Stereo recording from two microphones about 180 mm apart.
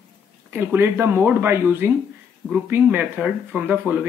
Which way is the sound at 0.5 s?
10° right (ahead or behind).